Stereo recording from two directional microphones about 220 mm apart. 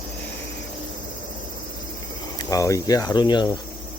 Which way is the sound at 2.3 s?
15° left (ahead or behind).